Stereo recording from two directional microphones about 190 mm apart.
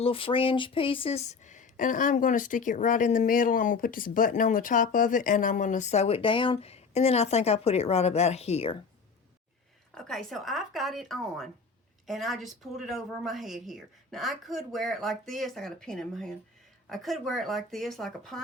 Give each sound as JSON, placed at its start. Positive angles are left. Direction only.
{"t": 0.0, "sound": "speech", "side_deg": 30}
{"t": 9.9, "sound": "a woman's voice", "side_deg": 0}